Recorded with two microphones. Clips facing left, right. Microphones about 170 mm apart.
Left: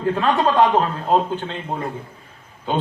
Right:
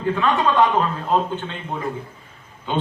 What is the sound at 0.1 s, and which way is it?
A man's voice, 35° left (ahead or behind).